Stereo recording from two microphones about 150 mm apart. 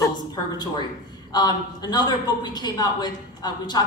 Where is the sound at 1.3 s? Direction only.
25° left (ahead or behind).